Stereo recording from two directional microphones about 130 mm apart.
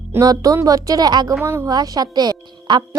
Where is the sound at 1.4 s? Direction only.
20° right (ahead or behind).